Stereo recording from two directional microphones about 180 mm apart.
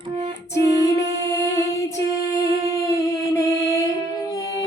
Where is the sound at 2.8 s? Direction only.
15° left (ahead or behind).